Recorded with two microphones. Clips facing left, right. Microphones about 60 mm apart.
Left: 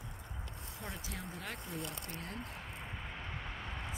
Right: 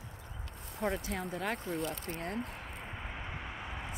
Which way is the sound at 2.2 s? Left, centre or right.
Right.